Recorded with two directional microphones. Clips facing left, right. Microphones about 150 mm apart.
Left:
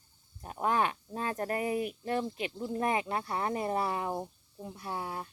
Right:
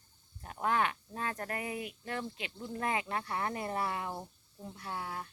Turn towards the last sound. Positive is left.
turn(degrees=25)  # may be behind; listen again after turning